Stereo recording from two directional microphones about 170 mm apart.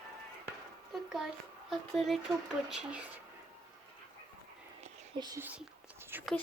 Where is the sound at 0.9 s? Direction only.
Centre (ahead or behind).